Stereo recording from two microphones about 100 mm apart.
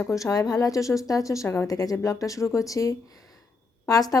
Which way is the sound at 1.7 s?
35° left (ahead or behind).